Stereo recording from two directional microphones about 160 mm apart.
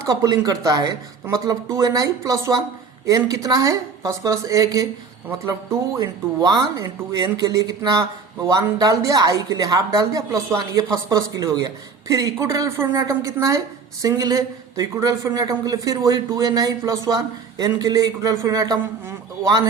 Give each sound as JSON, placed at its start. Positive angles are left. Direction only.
{"t": 0.0, "sound": "a woman's voice", "side_deg": -20}
{"t": 6.0, "sound": "a woman's voice", "side_deg": -25}